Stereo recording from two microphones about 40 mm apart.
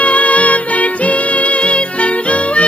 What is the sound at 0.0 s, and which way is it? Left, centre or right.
Music, left.